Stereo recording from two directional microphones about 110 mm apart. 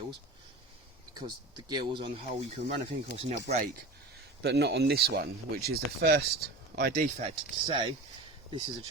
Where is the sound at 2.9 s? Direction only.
65° right (ahead or behind).